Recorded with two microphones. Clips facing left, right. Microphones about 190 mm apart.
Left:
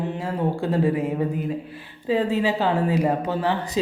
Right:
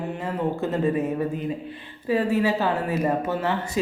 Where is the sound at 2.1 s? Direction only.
20° left (ahead or behind).